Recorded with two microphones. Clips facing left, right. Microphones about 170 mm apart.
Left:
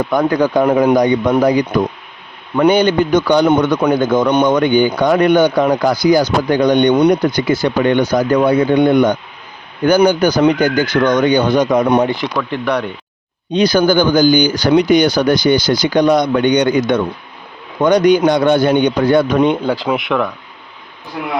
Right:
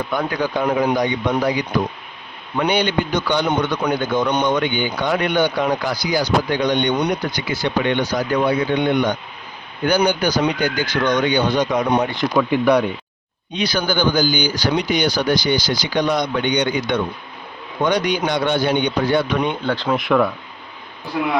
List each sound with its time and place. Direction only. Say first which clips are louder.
0.3 s a man's voice: left 8 dB; 45° left (ahead or behind)
12.4 s speech: right 5 dB; 10° right (ahead or behind)
13.5 s a man's voice: left 9 dB; 40° left (ahead or behind)
19.6 s speech: left 3 dB; 10° left (ahead or behind)